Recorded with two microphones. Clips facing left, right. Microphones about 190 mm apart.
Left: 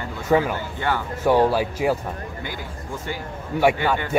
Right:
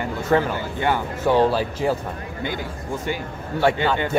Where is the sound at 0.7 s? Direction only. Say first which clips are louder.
Right 4 dB; 20° right (ahead or behind).